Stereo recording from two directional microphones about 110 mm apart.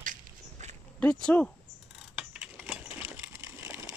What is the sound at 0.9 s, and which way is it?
Speech, 15° left (ahead or behind).